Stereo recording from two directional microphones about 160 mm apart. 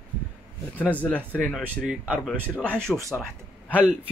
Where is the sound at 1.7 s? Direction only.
5° right (ahead or behind).